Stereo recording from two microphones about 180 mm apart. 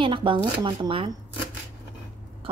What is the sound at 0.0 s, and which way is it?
Speech, 25° right (ahead or behind).